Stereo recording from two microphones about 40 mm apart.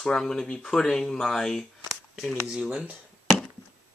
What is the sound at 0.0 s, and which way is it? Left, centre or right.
Speech, centre.